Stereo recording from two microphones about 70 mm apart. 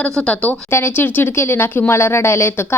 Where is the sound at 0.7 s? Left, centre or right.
Left.